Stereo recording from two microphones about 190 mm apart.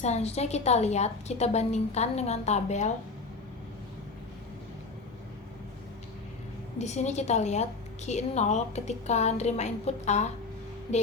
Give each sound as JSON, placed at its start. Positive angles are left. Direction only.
{"t": 0.0, "sound": "a woman's voice", "side_deg": 35}
{"t": 6.7, "sound": "a woman's voice", "side_deg": 35}